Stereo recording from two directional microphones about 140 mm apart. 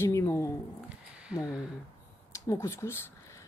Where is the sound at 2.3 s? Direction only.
25° left (ahead or behind).